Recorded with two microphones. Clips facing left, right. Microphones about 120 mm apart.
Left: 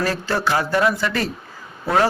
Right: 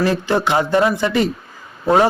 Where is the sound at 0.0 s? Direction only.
20° right (ahead or behind).